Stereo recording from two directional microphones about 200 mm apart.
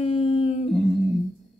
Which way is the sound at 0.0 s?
30° left (ahead or behind).